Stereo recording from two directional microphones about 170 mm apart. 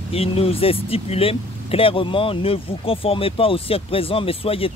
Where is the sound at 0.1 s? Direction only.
35° left (ahead or behind).